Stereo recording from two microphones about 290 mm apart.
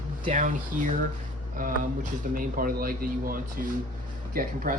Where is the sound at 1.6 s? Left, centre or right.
Right.